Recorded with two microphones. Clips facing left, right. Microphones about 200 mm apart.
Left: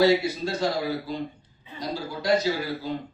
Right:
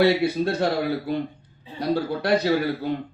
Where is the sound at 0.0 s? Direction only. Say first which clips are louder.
Right 2 dB; 60° right (ahead or behind).